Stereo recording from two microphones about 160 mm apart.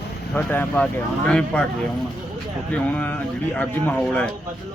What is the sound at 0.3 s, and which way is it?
Speech, 15° left (ahead or behind).